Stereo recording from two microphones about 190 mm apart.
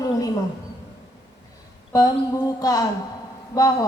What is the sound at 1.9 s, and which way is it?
Speech, 20° left (ahead or behind).